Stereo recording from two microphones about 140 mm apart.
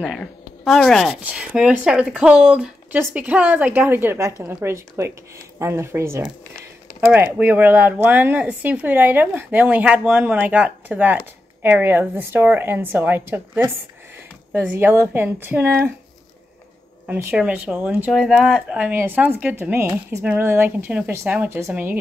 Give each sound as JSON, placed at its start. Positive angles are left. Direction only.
{"t": 0.0, "sound": "speech", "side_deg": 0}
{"t": 7.3, "sound": "speech", "side_deg": -10}
{"t": 14.5, "sound": "speech", "side_deg": -15}
{"t": 17.0, "sound": "speech", "side_deg": -15}